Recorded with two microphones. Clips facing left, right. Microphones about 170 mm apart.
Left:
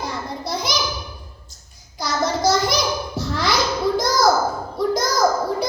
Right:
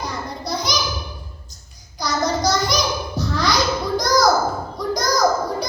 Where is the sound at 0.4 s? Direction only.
25° left (ahead or behind).